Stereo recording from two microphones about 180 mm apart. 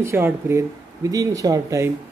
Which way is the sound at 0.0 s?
15° right (ahead or behind).